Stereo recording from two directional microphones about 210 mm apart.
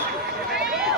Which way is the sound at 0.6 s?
Centre (ahead or behind).